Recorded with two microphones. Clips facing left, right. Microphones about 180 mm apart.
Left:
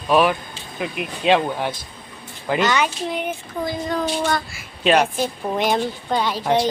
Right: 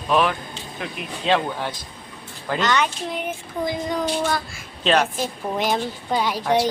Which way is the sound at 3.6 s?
15° right (ahead or behind).